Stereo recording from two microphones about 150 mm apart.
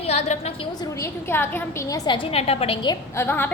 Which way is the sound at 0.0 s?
45° left (ahead or behind).